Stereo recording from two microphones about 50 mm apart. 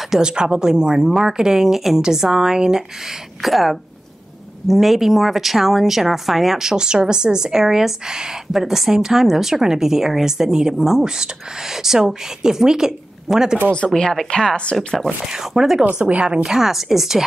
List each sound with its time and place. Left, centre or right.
0.1 s a woman's voice: centre
13.9 s speech: centre
15.2 s a woman's voice: centre
15.8 s speech: right
16.4 s speech: centre